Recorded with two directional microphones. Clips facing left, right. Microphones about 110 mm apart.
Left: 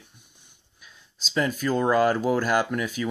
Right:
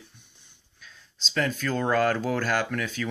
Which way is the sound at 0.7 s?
10° left (ahead or behind).